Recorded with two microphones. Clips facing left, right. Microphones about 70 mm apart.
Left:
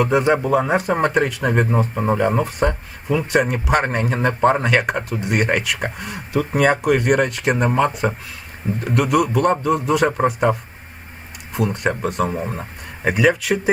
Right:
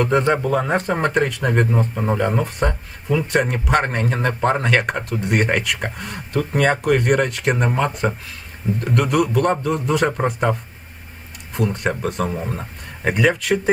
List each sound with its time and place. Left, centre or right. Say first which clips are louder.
0.0 s speech: left 1 dB; centre